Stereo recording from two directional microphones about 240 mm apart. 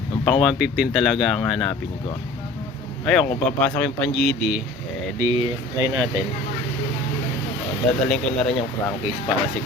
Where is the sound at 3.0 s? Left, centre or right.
Centre.